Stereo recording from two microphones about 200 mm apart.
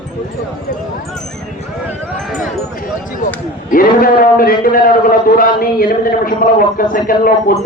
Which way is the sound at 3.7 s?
45° left (ahead or behind).